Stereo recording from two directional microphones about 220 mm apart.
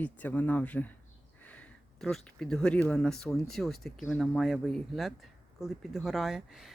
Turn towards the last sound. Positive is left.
turn(degrees=0)  # may be behind; listen again after turning